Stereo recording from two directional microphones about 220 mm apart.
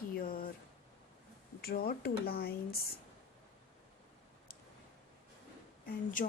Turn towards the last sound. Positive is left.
turn(degrees=40)  # may be behind; listen again after turning